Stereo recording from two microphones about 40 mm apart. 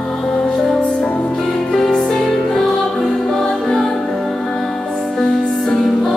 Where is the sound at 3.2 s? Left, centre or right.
Centre.